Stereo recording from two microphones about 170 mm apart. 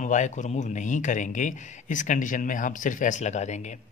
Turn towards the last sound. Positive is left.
turn(degrees=45)  # may be behind; listen again after turning